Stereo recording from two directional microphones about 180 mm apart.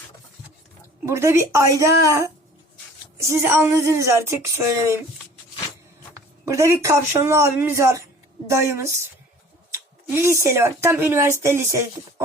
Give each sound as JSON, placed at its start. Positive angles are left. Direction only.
{"t": 1.0, "sound": "speech", "side_deg": -15}
{"t": 6.4, "sound": "speech", "side_deg": -15}